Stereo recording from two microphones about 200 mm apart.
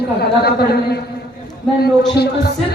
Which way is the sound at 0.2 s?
55° left (ahead or behind).